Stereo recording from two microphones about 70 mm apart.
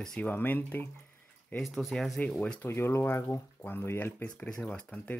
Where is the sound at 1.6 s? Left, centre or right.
Centre.